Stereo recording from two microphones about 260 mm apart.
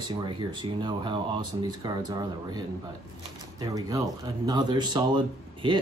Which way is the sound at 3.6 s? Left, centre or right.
Centre.